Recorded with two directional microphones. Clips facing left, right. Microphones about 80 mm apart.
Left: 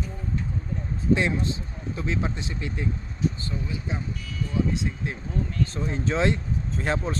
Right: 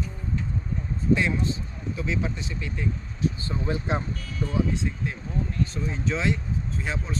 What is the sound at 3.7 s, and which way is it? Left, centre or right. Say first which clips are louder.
Speech: right 6 dB; right.